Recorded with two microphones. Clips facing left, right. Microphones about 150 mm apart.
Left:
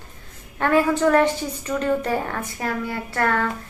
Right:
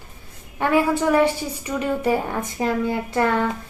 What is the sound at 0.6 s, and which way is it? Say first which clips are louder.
A woman's voice: left 1 dB; 10° right (ahead or behind).